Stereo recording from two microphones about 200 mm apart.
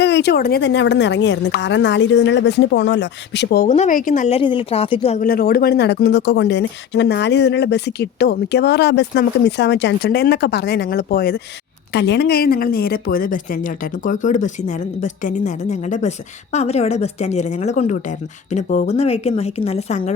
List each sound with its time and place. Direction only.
0.0 s speech: 60° left (ahead or behind)
3.7 s a woman's voice: 35° left (ahead or behind)
5.2 s a woman's voice: 45° left (ahead or behind)